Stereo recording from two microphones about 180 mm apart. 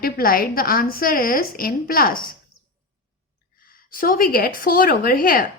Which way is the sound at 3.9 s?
50° left (ahead or behind).